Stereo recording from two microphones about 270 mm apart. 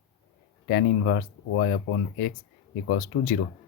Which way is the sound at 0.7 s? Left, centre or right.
Left.